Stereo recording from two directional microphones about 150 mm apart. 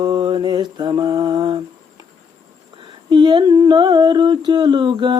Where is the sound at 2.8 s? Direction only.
30° right (ahead or behind).